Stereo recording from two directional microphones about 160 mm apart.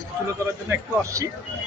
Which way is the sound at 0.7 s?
20° right (ahead or behind).